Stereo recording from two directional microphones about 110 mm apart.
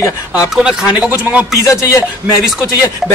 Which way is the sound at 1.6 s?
30° left (ahead or behind).